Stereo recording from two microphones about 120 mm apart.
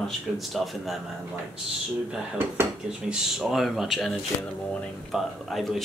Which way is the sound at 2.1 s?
15° right (ahead or behind).